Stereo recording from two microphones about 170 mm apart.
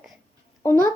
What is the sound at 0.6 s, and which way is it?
Speech, 15° left (ahead or behind).